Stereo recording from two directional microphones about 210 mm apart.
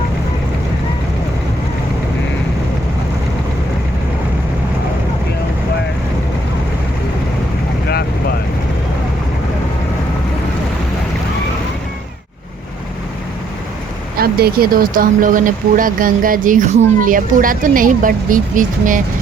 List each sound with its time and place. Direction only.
14.2 s speech: 45° right (ahead or behind)